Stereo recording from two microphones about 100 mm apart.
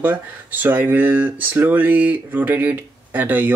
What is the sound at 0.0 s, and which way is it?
Speech, 15° right (ahead or behind).